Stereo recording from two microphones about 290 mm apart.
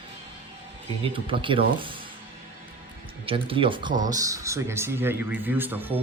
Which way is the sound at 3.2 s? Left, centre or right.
Centre.